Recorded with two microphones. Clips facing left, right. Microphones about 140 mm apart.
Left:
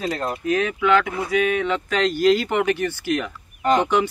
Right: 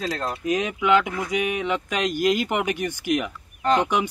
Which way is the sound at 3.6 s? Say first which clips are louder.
Left 2 dB; 10° left (ahead or behind).